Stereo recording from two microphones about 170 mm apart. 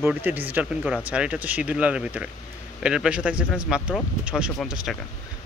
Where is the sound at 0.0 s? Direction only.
10° right (ahead or behind).